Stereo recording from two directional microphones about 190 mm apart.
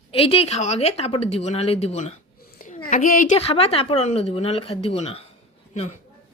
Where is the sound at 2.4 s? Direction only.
45° left (ahead or behind).